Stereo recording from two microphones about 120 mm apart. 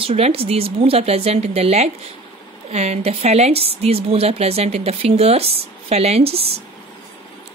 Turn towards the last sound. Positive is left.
turn(degrees=-55)  # may be behind; listen again after turning